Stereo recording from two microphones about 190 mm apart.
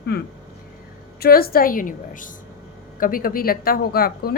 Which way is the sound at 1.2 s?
50° left (ahead or behind).